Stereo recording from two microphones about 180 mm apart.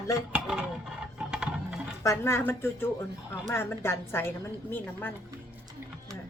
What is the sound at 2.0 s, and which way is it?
A woman's voice, 15° left (ahead or behind).